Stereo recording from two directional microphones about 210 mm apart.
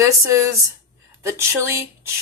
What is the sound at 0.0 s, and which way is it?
Speech, 15° right (ahead or behind).